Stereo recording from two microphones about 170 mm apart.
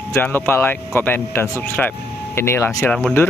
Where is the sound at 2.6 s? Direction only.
5° left (ahead or behind).